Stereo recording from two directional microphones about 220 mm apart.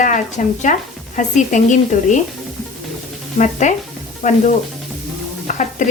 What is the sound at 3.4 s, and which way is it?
Speech, 35° left (ahead or behind).